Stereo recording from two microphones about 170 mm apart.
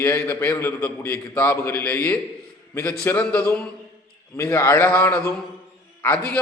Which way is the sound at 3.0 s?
15° left (ahead or behind).